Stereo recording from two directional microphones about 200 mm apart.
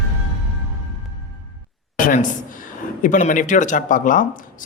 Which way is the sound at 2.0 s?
40° left (ahead or behind).